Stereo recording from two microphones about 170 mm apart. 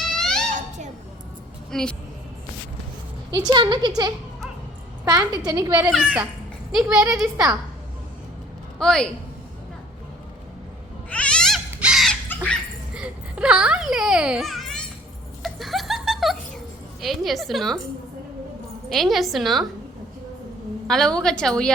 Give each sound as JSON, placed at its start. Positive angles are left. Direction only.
{"t": 0.2, "sound": "a sound", "side_deg": 5}
{"t": 1.7, "sound": "a woman's voice", "side_deg": 5}
{"t": 3.3, "sound": "a child's voice", "side_deg": -25}
{"t": 5.8, "sound": "a child's voice", "side_deg": -5}
{"t": 8.8, "sound": "a woman's voice", "side_deg": 5}
{"t": 11.1, "sound": "cat", "side_deg": 5}
{"t": 11.7, "sound": "crow", "side_deg": -5}
{"t": 12.9, "sound": "a sound", "side_deg": -5}
{"t": 15.4, "sound": "chuckle", "side_deg": 0}
{"t": 17.0, "sound": "a woman's voice", "side_deg": 0}
{"t": 18.9, "sound": "a woman's voice", "side_deg": 0}
{"t": 20.8, "sound": "a woman's voice", "side_deg": 5}